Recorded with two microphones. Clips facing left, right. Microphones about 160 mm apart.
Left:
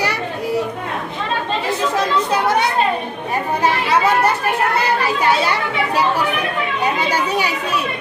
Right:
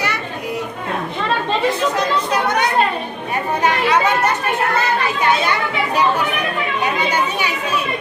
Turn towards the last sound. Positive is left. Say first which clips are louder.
# left 1 dB
turn(degrees=40)  # may be behind; listen again after turning